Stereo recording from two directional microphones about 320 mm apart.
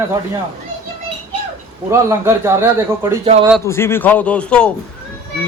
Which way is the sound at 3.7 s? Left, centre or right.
Centre.